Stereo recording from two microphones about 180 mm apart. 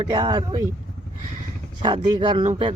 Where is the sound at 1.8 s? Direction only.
25° right (ahead or behind).